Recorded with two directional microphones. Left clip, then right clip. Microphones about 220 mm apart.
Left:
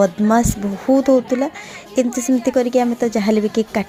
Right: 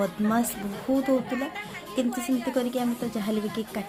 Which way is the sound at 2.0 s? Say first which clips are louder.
Left 10 dB; 35° left (ahead or behind).